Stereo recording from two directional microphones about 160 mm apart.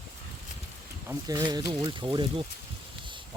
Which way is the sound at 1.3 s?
25° right (ahead or behind).